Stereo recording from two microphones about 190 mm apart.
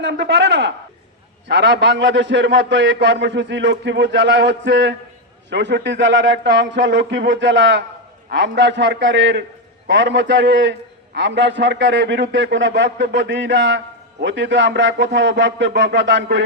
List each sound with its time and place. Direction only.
0.0 s a man's voice: 65° right (ahead or behind)